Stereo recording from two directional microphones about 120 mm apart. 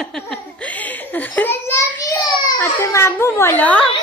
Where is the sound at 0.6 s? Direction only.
10° left (ahead or behind).